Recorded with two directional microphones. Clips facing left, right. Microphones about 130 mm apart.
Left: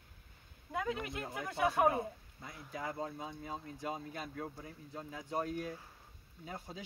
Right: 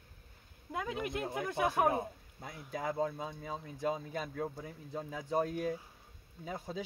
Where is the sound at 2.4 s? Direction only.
85° right.